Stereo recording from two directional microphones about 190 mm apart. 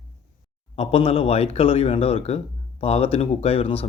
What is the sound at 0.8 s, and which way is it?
Speech, 30° left (ahead or behind).